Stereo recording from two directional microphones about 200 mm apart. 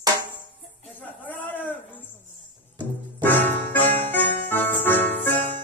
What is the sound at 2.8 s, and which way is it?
Music, 10° left (ahead or behind).